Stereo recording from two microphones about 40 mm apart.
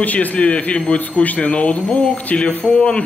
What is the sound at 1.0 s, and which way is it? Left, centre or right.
Speech, left.